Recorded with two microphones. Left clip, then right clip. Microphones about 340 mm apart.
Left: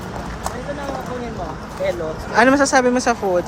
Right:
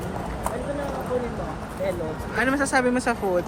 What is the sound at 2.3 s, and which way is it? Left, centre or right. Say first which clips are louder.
A woman's voice: left 9 dB; centre.